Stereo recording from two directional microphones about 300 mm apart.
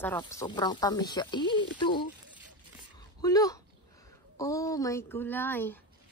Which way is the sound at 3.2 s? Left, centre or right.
Centre.